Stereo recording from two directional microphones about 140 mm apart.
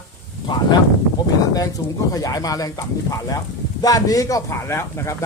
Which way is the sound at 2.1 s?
25° left (ahead or behind).